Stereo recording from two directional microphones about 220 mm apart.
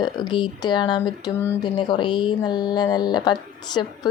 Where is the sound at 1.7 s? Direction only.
20° left (ahead or behind).